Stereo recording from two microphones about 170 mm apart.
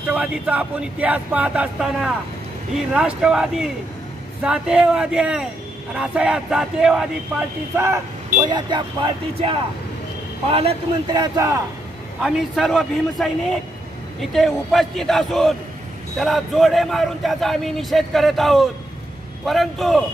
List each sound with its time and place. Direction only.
0.0 s a man's voice: 5° right (ahead or behind)
7.7 s speech: 15° right (ahead or behind)
8.4 s a man's voice: 25° right (ahead or behind)
12.2 s a man's voice: centre (ahead or behind)